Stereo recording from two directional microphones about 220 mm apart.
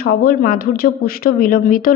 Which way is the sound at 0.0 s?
40° left (ahead or behind).